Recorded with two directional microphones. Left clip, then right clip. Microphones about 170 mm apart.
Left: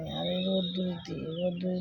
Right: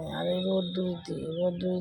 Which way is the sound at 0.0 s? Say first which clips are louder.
Right 2 dB; centre (ahead or behind).